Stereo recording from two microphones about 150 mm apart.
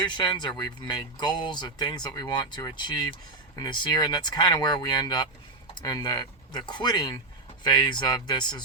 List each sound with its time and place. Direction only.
0.0 s speech: 30° left (ahead or behind)